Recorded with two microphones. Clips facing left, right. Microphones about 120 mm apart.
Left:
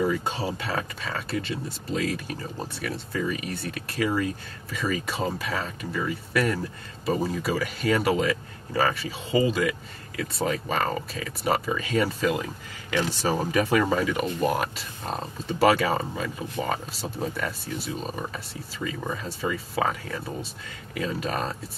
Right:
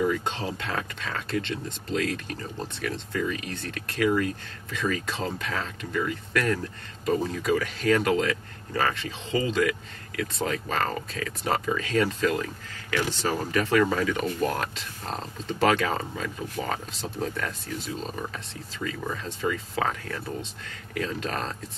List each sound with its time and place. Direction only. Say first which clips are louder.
0.0 s speech: left 1 dB; 5° left (ahead or behind)